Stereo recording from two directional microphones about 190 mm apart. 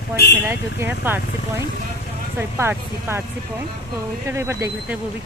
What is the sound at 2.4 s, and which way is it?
Speech, 10° right (ahead or behind).